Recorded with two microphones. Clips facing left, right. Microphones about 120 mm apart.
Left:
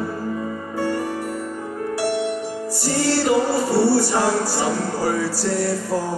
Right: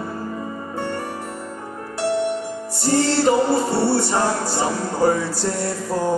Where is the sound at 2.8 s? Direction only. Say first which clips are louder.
Right 2 dB; 25° right (ahead or behind).